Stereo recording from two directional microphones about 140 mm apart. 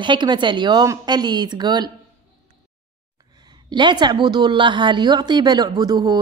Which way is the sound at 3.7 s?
35° right (ahead or behind).